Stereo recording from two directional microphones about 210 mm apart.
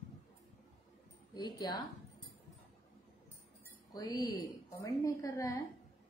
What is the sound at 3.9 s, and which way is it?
Speech, 15° left (ahead or behind).